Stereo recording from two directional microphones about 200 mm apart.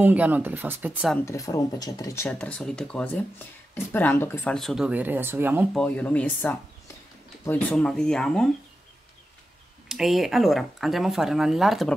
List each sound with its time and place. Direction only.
0.0 s speech: 10° right (ahead or behind)
1.1 s speech: 15° left (ahead or behind)
2.3 s speech: 5° left (ahead or behind)
5.7 s speech: 5° left (ahead or behind)
9.8 s speech: centre (ahead or behind)